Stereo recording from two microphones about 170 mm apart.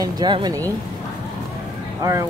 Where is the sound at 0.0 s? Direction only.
25° right (ahead or behind).